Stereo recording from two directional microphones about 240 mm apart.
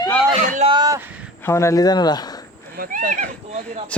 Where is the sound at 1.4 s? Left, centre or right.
Centre.